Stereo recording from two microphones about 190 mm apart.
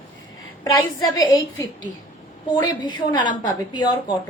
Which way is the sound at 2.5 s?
20° left (ahead or behind).